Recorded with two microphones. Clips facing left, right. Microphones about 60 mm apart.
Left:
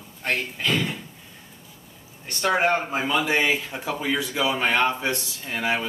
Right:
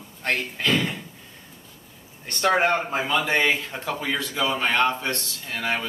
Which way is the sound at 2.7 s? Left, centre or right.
Centre.